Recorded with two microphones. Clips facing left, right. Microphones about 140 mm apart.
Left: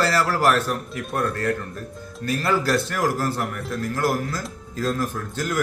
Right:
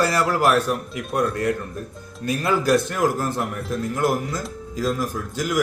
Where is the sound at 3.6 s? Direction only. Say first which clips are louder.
Right 2 dB; centre (ahead or behind).